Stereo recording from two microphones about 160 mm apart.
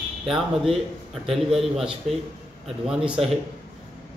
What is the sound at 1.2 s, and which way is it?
Speech, centre (ahead or behind).